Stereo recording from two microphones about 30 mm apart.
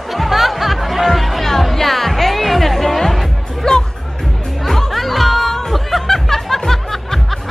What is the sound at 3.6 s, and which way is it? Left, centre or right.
Music, left.